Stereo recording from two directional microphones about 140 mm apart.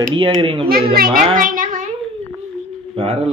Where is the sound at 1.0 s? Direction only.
90° right.